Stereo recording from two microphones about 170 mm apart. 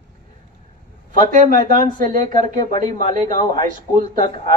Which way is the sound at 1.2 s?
50° right (ahead or behind).